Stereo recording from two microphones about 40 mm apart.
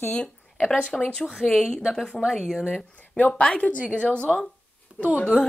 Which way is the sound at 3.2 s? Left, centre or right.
Left.